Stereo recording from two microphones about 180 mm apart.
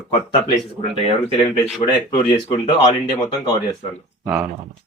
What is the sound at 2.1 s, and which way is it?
Speech, 35° left (ahead or behind).